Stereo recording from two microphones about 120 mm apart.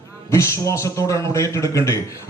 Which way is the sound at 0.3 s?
25° left (ahead or behind).